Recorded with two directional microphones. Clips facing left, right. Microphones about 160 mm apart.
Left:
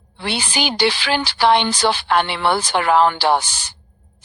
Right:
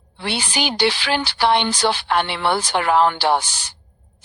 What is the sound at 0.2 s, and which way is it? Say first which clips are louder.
A woman's voice: left 1 dB; 90° left.